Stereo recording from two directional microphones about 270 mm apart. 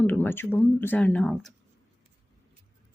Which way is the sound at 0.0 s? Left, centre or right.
Centre.